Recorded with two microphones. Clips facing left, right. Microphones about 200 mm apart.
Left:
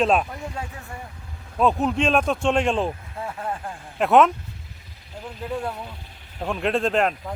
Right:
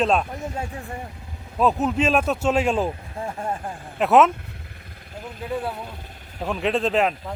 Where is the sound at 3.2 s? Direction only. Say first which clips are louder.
Right 2 dB; 25° right (ahead or behind).